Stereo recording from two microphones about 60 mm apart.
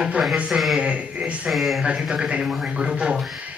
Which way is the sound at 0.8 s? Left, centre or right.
Centre.